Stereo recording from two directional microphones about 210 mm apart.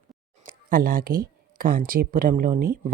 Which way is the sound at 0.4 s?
40° right (ahead or behind).